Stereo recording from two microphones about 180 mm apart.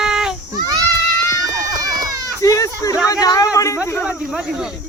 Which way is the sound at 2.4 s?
15° left (ahead or behind).